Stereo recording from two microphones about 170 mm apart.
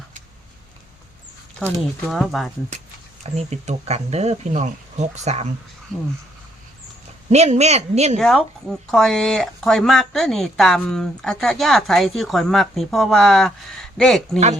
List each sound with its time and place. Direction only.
2.0 s speech: centre (ahead or behind)
3.3 s speech: 40° right (ahead or behind)
7.3 s speech: 40° right (ahead or behind)
8.2 s speech: centre (ahead or behind)
14.3 s speech: 40° right (ahead or behind)